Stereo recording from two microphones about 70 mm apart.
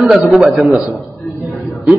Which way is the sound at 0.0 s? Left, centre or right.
Centre.